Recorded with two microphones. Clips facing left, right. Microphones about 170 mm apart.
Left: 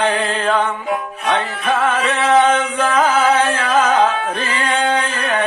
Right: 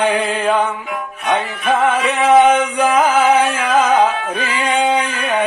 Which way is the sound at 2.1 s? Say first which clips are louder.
Right 3 dB; 15° right (ahead or behind).